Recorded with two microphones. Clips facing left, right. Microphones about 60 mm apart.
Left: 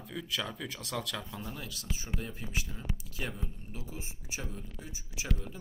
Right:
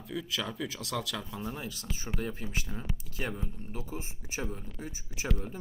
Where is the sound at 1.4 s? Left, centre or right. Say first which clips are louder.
Right 4 dB; centre.